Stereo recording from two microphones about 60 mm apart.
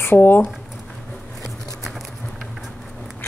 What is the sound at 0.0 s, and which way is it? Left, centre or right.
Speech, left.